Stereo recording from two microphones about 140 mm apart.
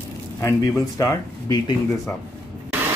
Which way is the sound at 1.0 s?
25° left (ahead or behind).